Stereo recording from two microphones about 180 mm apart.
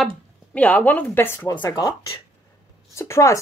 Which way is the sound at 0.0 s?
5° left (ahead or behind).